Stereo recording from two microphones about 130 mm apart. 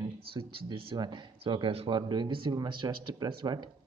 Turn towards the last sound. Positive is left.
turn(degrees=-35)  # may be behind; listen again after turning